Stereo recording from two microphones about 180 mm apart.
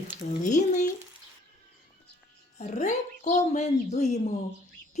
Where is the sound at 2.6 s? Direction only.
40° left (ahead or behind).